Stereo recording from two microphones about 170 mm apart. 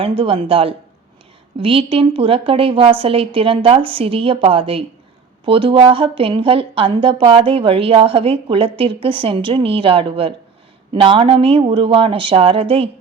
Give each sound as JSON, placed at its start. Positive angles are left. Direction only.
{"t": 0.0, "sound": "a woman's voice", "side_deg": -35}
{"t": 1.9, "sound": "a woman's voice", "side_deg": -35}